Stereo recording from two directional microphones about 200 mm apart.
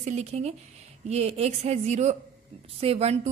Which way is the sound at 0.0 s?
35° right (ahead or behind).